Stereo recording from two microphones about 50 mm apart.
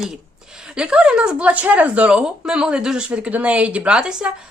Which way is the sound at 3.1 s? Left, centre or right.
Right.